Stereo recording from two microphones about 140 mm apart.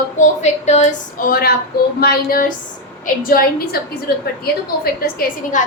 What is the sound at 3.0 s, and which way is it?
A woman's voice, 80° left.